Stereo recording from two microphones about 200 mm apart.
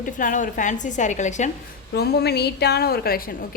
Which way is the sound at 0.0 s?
40° left (ahead or behind).